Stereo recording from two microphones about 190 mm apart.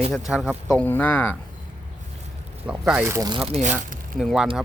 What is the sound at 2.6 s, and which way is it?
Speech, 5° right (ahead or behind).